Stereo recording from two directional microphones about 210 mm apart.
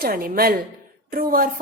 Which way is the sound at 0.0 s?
45° right (ahead or behind).